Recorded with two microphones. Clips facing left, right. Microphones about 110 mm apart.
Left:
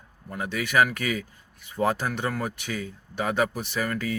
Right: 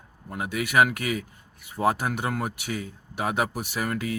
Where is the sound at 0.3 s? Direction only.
20° right (ahead or behind).